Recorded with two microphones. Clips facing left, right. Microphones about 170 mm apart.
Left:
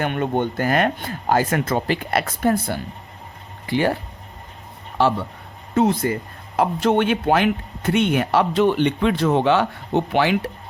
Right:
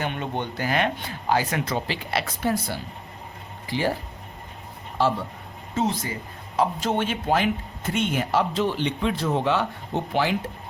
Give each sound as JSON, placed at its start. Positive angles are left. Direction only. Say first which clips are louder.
{"t": 0.0, "sound": "speech", "louder": "left 7 dB", "side_deg": 55}
{"t": 5.0, "sound": "speech", "louder": "left 4 dB", "side_deg": 65}